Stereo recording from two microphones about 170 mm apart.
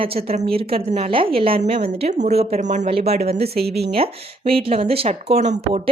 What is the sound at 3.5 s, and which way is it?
Speech, 70° right (ahead or behind).